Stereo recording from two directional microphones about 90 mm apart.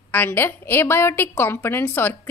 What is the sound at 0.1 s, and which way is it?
A woman's voice, 25° left (ahead or behind).